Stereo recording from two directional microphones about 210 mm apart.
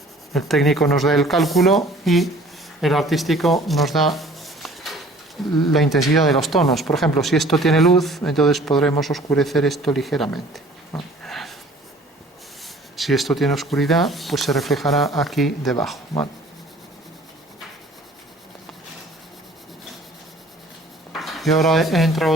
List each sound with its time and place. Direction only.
0.3 s speech: centre (ahead or behind)
13.0 s speech: centre (ahead or behind)
21.1 s speech: centre (ahead or behind)